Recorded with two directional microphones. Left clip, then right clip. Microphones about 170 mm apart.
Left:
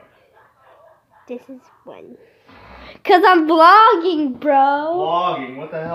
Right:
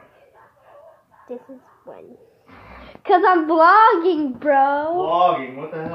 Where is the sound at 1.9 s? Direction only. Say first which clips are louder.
Left 1 dB; 30° left (ahead or behind).